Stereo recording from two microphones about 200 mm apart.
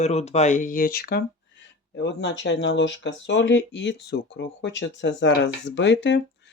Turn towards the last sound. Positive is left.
turn(degrees=60)  # may be behind; listen again after turning